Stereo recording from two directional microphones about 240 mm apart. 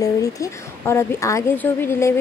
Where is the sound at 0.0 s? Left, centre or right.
Centre.